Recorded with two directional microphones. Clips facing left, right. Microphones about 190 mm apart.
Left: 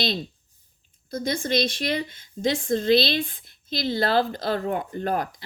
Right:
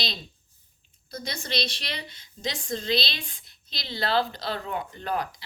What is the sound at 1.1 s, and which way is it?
Speech, 50° left (ahead or behind).